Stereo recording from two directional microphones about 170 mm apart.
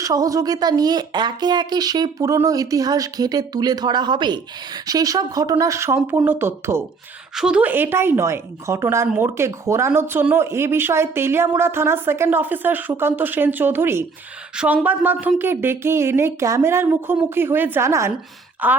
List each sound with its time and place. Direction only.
0.0 s a woman's voice: 20° right (ahead or behind)